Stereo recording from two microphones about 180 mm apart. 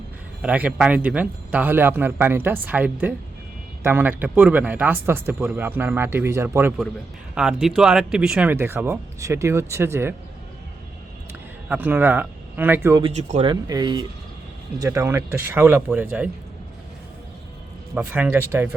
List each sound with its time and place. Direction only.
0.4 s speech: 5° right (ahead or behind)
11.3 s speech: 10° right (ahead or behind)
13.0 s speech: 35° right (ahead or behind)
13.5 s speech: 20° right (ahead or behind)
17.9 s speech: 10° right (ahead or behind)